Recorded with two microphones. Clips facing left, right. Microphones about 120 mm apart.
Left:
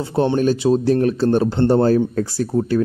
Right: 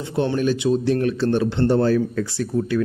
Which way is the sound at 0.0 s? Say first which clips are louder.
Left 4 dB; 35° left (ahead or behind).